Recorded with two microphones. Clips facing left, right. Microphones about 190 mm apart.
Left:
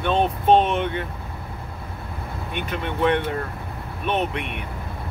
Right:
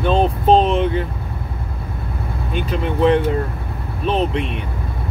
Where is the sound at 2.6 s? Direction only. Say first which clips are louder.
Right 6 dB; 30° right (ahead or behind).